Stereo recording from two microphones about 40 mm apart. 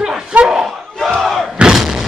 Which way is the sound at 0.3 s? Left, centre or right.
Right.